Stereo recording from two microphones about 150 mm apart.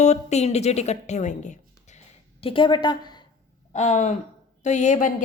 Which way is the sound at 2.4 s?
35° left (ahead or behind).